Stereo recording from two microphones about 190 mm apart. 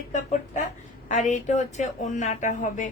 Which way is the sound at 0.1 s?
40° left (ahead or behind).